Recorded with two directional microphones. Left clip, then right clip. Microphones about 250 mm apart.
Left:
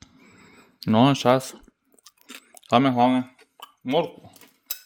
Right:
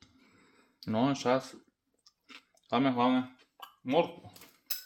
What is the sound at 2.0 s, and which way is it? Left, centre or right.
Chewing, left.